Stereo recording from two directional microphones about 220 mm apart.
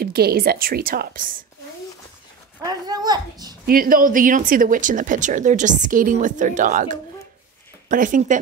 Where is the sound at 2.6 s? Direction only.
20° right (ahead or behind).